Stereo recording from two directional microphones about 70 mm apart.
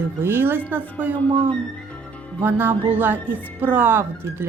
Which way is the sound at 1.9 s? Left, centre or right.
Left.